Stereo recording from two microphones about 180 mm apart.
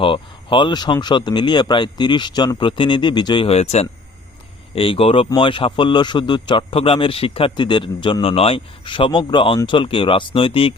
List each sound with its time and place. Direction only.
0.0 s speech: 30° left (ahead or behind)